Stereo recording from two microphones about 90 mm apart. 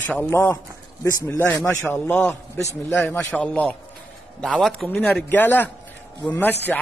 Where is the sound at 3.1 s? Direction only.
10° left (ahead or behind).